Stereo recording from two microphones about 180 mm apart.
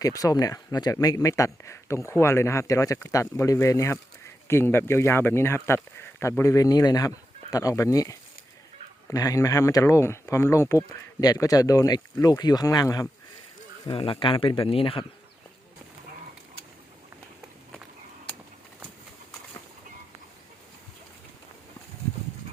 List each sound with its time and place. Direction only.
0.0 s speech: 20° left (ahead or behind)